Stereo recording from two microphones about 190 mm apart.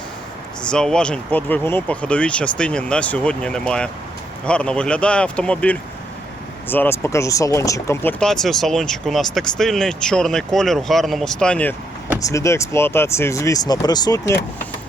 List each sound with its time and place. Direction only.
0.6 s speech: 5° left (ahead or behind)
8.2 s speech: centre (ahead or behind); by 14.3 s 20° left (ahead or behind)